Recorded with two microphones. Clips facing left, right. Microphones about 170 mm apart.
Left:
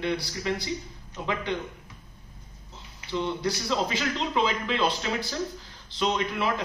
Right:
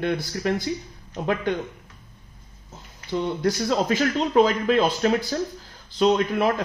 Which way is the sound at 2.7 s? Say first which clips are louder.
Right 3 dB; 45° right (ahead or behind).